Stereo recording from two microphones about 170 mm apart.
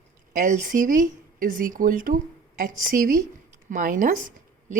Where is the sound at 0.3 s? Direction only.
50° right (ahead or behind).